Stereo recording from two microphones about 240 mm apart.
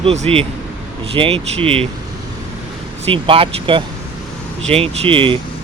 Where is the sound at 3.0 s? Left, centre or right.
Right.